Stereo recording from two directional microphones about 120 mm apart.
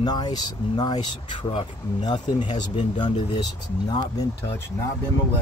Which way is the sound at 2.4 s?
80° left.